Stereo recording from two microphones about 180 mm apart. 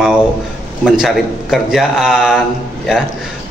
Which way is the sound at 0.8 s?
Centre (ahead or behind).